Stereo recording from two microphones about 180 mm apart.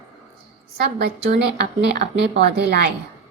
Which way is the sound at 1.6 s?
70° right (ahead or behind).